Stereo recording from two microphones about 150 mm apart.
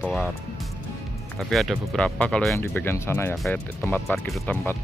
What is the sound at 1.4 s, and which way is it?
Speech, centre (ahead or behind).